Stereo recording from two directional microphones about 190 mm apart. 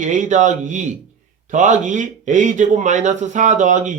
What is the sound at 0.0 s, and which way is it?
A man's voice, 40° right (ahead or behind).